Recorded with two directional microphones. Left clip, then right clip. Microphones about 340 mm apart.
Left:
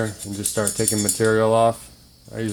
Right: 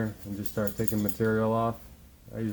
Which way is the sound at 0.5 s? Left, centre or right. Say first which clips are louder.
Left 8 dB; left.